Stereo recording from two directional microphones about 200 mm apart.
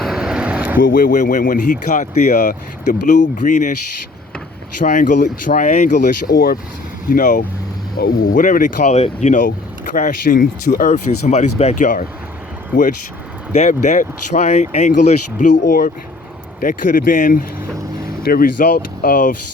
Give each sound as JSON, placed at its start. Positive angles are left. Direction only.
{"t": 0.0, "sound": "vehicle", "side_deg": -5}
{"t": 0.8, "sound": "speech", "side_deg": 45}
{"t": 4.8, "sound": "speech", "side_deg": 40}